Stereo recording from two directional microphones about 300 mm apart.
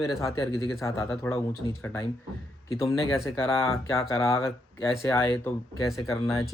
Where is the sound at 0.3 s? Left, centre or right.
Centre.